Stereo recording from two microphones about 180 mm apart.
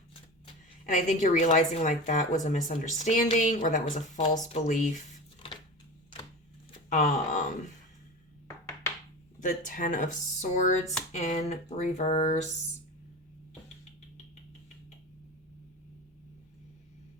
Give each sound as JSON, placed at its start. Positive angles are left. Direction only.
{"t": 0.1, "sound": "shuffling cards", "side_deg": 30}
{"t": 0.9, "sound": "a woman's voice", "side_deg": 45}
{"t": 6.9, "sound": "a woman's voice", "side_deg": 45}
{"t": 9.4, "sound": "a woman's voice", "side_deg": 45}
{"t": 11.1, "sound": "a sound", "side_deg": 40}